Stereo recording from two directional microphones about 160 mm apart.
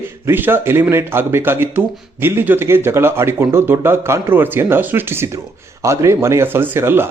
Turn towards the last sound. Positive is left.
turn(degrees=-15)  # may be behind; listen again after turning